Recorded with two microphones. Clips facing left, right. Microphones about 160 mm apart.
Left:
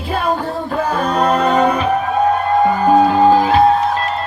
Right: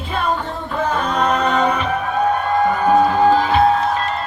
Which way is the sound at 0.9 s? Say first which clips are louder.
Left 3 dB; 35° left (ahead or behind).